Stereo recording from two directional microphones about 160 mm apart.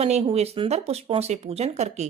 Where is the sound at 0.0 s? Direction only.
40° right (ahead or behind).